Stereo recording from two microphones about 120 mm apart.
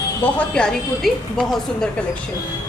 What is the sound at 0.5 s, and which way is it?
A woman's voice, 5° left (ahead or behind).